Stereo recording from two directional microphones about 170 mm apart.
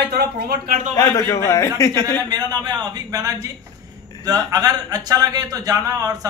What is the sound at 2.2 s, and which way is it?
Speech, 25° right (ahead or behind).